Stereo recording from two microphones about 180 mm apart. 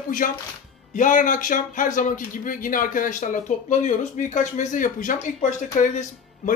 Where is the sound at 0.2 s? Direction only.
50° left (ahead or behind).